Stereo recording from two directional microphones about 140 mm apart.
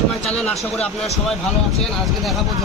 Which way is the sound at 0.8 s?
50° left (ahead or behind).